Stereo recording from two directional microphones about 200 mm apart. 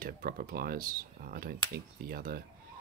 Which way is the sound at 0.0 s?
45° right (ahead or behind).